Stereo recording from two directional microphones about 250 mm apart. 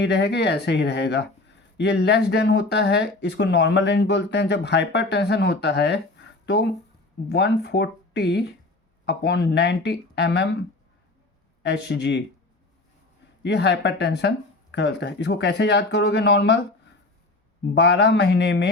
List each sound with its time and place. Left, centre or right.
0.0 s speech: left
11.6 s speech: left
13.4 s speech: left
17.7 s speech: left